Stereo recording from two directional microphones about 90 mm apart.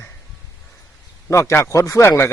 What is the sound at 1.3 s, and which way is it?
A man's voice, 30° left (ahead or behind).